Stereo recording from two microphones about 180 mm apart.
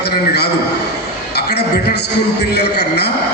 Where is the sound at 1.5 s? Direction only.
65° left (ahead or behind).